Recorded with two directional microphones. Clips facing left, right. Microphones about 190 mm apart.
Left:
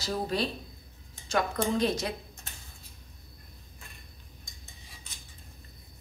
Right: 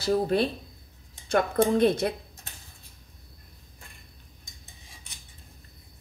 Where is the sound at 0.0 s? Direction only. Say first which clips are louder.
Right 7 dB; 55° right (ahead or behind).